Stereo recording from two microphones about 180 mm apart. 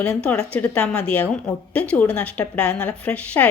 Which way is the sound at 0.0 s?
5° left (ahead or behind).